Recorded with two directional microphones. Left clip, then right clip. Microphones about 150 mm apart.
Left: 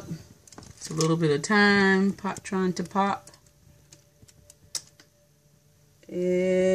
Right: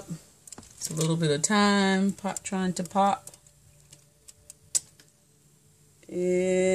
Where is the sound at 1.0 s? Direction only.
10° right (ahead or behind).